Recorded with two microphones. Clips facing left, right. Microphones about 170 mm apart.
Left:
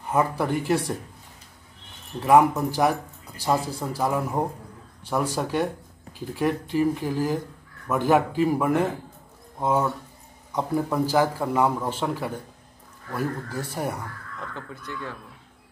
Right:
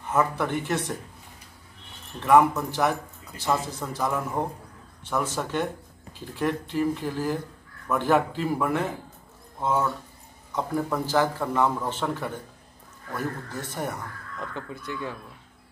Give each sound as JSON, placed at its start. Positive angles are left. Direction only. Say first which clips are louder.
{"t": 0.1, "sound": "a man's voice", "louder": "left 1 dB", "side_deg": 10}
{"t": 2.1, "sound": "a man's voice", "louder": "left 1 dB", "side_deg": 10}
{"t": 14.5, "sound": "speech", "louder": "right 3 dB", "side_deg": -15}